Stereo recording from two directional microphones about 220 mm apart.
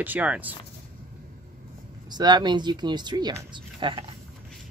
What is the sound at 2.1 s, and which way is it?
Speech, 20° right (ahead or behind).